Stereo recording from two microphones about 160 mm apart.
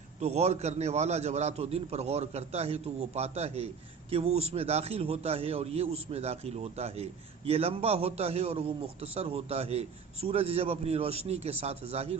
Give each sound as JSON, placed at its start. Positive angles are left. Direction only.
{"t": 0.2, "sound": "a man's voice", "side_deg": -40}